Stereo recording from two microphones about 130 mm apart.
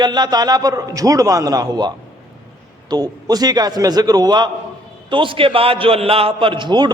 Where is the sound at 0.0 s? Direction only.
35° right (ahead or behind).